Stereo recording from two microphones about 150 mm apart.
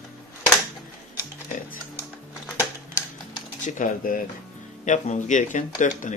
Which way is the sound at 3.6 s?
60° left (ahead or behind).